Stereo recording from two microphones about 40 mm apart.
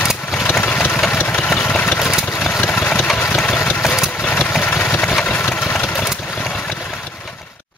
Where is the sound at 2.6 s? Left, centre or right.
Left.